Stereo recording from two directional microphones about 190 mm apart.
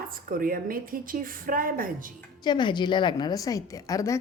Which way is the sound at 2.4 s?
25° left (ahead or behind).